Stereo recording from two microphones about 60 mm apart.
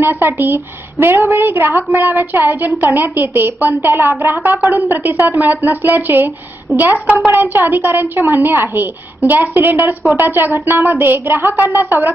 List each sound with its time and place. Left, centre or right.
0.0 s a woman's voice: right
6.7 s a woman's voice: right
7.2 s a woman's voice: right